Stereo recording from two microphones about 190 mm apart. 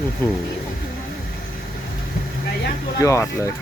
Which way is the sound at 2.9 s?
15° left (ahead or behind).